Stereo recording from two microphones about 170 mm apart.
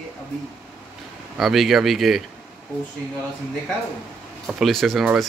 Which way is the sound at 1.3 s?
Centre (ahead or behind).